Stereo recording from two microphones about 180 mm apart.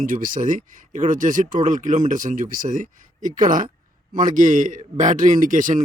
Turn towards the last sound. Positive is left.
turn(degrees=-45)  # may be behind; listen again after turning